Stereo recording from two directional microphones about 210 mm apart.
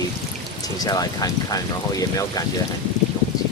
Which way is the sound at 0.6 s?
15° left (ahead or behind).